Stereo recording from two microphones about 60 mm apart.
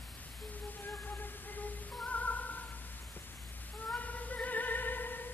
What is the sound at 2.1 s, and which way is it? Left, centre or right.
Music, left.